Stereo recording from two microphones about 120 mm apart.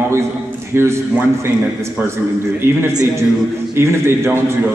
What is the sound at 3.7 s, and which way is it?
Speech, 20° right (ahead or behind).